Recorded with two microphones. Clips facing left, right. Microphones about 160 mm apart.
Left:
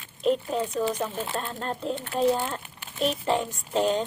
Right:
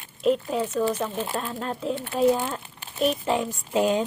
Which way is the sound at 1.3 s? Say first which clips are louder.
Right 2 dB; 5° right (ahead or behind).